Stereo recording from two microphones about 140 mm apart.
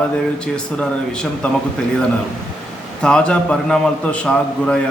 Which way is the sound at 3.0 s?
5° left (ahead or behind).